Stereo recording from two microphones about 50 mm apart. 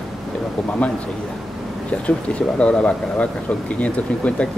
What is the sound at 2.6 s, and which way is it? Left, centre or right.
Speech, left.